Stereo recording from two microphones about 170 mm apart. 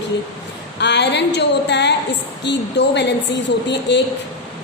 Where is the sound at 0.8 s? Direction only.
90° left.